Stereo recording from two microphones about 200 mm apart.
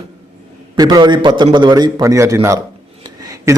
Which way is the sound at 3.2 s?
15° right (ahead or behind).